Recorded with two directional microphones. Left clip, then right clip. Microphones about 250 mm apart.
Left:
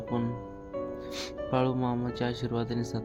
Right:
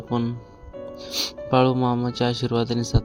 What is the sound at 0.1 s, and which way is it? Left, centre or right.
Speech, right.